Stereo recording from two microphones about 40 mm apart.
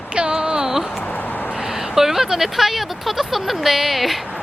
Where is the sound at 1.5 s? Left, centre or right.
Centre.